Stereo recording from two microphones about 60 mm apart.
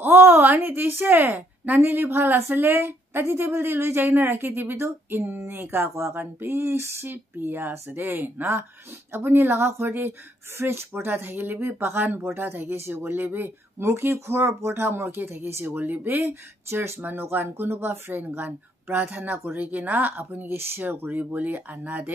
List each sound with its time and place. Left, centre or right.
0.0 s a woman's voice: right
4.7 s speech: right
15.6 s speech: right